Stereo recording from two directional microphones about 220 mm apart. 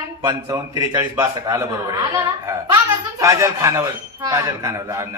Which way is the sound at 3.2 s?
15° right (ahead or behind).